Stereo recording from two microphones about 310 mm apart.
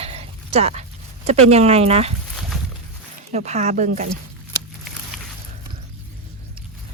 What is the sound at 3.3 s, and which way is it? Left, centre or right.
Speech, right.